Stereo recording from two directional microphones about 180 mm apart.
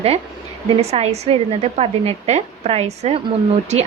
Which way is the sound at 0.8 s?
35° right (ahead or behind).